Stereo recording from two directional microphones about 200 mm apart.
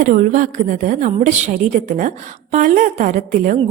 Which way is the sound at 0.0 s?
40° right (ahead or behind).